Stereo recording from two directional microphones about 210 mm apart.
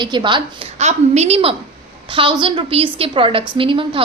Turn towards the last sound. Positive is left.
turn(degrees=-25)  # may be behind; listen again after turning